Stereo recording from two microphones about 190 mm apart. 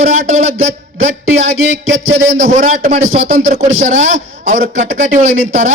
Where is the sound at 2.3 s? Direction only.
40° right (ahead or behind).